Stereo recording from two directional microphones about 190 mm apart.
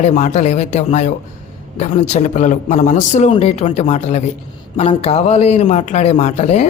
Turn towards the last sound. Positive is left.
turn(degrees=35)  # may be behind; listen again after turning